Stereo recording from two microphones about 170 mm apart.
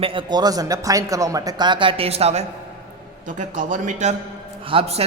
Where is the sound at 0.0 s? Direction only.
30° right (ahead or behind).